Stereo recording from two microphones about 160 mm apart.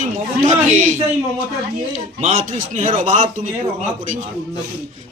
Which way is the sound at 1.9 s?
50° right (ahead or behind).